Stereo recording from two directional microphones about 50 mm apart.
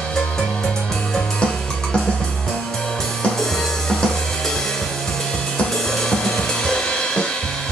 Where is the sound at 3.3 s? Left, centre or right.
Centre.